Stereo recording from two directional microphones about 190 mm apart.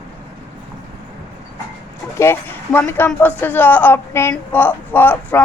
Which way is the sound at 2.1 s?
15° left (ahead or behind).